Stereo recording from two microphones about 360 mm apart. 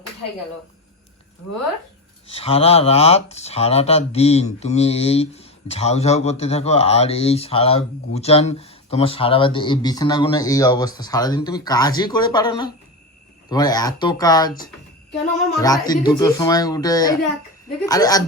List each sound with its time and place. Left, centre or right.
2.2 s speech: centre
15.6 s speech: centre